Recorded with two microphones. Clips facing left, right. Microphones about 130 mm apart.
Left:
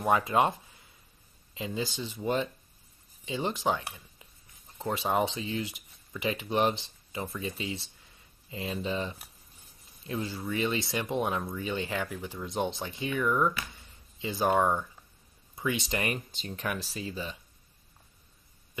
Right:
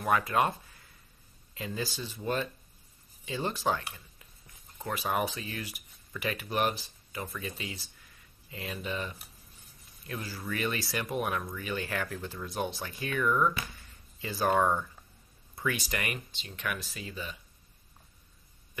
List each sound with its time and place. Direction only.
0.0 s speech: 25° left (ahead or behind)
16.3 s speech: 40° left (ahead or behind)